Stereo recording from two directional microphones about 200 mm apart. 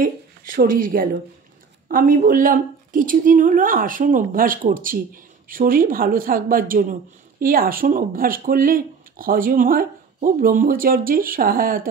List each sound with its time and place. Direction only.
0.0 s speech: 45° right (ahead or behind)